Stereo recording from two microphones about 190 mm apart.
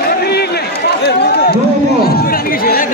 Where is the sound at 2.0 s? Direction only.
55° left (ahead or behind).